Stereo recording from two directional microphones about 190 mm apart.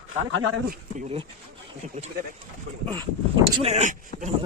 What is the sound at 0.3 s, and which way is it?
Speech, 90° right.